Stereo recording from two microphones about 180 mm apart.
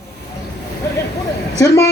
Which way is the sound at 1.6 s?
15° left (ahead or behind).